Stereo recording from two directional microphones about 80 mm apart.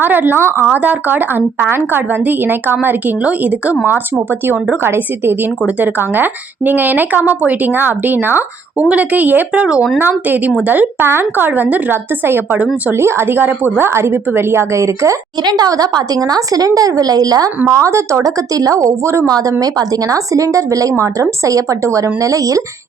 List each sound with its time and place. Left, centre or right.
0.0 s a woman's voice: right
15.4 s a woman's voice: right
17.7 s a woman's voice: right